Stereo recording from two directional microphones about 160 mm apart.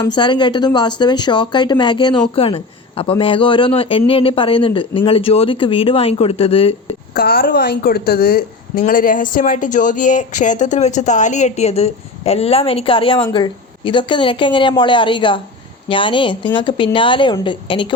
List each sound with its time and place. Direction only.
0.0 s speech: 30° left (ahead or behind)
7.1 s a woman's voice: 70° left (ahead or behind)
8.8 s speech: 60° left (ahead or behind); by 17.8 s 30° left (ahead or behind)